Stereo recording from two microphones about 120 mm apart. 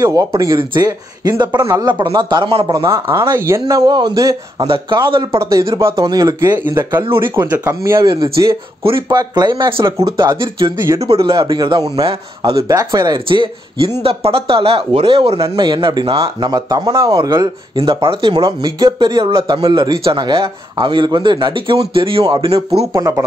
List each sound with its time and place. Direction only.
0.0 s speech: 25° right (ahead or behind)
1.6 s speech: 25° right (ahead or behind)
1.9 s speech: 40° right (ahead or behind)
2.6 s speech: 30° right (ahead or behind)
4.6 s a man's voice: 45° right (ahead or behind)
5.4 s speech: 25° right (ahead or behind)
6.6 s speech: 20° right (ahead or behind)
7.1 s a man's voice: 45° right (ahead or behind)
7.6 s a man's voice: 25° right (ahead or behind); by 11.2 s 55° right (ahead or behind)
11.2 s speech: 40° right (ahead or behind)
12.0 s a man's voice: 50° right (ahead or behind)
12.6 s a man's voice: 30° right (ahead or behind)
18.4 s a man's voice: 30° right (ahead or behind); by 22.7 s 55° right (ahead or behind)
22.9 s speech: 25° right (ahead or behind)